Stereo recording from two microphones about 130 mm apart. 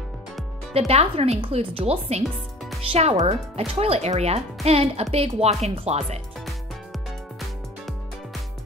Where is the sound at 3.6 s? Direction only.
50° right (ahead or behind).